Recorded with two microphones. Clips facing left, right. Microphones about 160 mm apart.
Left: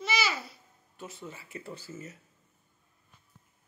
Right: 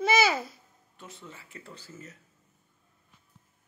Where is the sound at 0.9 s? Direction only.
5° left (ahead or behind).